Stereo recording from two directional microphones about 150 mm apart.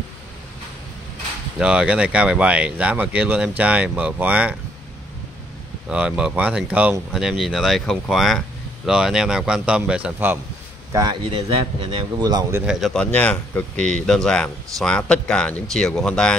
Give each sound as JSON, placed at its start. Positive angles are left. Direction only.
{"t": 1.6, "sound": "speech", "side_deg": -5}
{"t": 5.9, "sound": "speech", "side_deg": -5}
{"t": 10.9, "sound": "speech", "side_deg": -25}
{"t": 11.2, "sound": "a man's voice", "side_deg": -35}
{"t": 12.6, "sound": "speech", "side_deg": 0}